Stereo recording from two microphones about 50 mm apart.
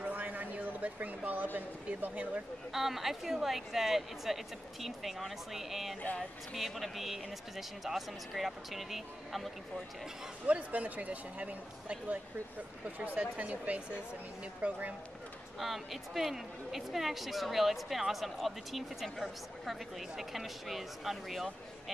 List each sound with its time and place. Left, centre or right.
0.0 s a sound: right
2.0 s speech: right
2.7 s speech: centre
10.4 s speech: right
15.6 s speech: centre